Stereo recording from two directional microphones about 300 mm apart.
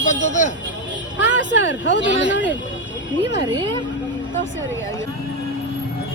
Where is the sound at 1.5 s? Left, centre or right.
Left.